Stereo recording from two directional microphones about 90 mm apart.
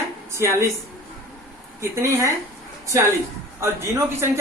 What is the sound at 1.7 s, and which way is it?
Speech, 30° right (ahead or behind).